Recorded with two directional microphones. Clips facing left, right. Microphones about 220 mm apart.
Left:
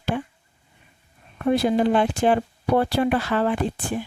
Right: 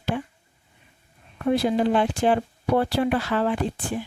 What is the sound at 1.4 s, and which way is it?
A woman's voice, 50° left (ahead or behind).